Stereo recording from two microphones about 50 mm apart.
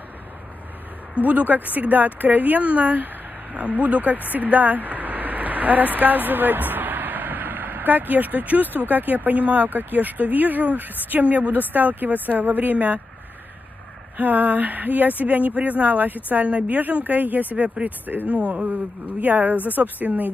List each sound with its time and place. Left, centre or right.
1.1 s speech: right
14.1 s speech: right